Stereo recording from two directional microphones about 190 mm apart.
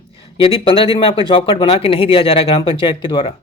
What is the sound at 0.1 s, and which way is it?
Speech, 30° left (ahead or behind).